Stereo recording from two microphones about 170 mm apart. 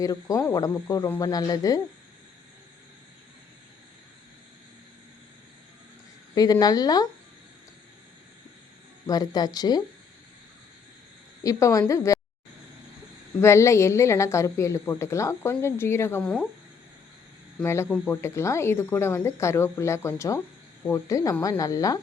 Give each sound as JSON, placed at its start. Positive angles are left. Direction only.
{"t": 0.0, "sound": "speech", "side_deg": 20}
{"t": 6.3, "sound": "speech", "side_deg": 20}
{"t": 9.0, "sound": "speech", "side_deg": 25}
{"t": 11.4, "sound": "speech", "side_deg": 20}
{"t": 13.4, "sound": "speech", "side_deg": 15}
{"t": 17.6, "sound": "speech", "side_deg": 15}